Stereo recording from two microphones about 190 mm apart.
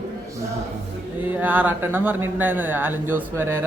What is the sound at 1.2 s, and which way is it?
Speech, 10° right (ahead or behind).